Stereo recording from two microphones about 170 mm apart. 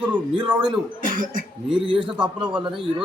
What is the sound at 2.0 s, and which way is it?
Speech, 5° right (ahead or behind).